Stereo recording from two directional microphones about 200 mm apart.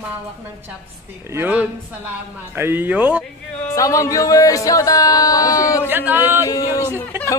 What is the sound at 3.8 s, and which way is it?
Speech, 15° left (ahead or behind).